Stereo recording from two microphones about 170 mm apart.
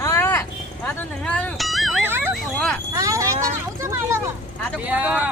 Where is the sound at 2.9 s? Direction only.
20° right (ahead or behind).